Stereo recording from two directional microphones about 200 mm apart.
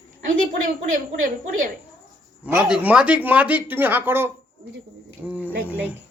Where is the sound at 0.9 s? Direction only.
40° right (ahead or behind).